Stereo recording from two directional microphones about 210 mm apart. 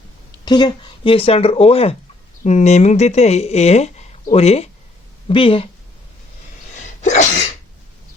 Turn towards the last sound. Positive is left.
turn(degrees=35)  # may be behind; listen again after turning